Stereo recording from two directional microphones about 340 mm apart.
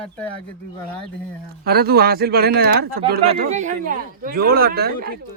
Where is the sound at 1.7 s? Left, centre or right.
Right.